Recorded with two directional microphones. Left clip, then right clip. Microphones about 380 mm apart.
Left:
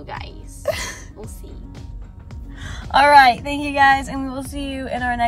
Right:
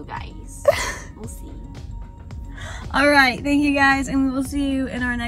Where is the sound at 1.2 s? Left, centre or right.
Centre.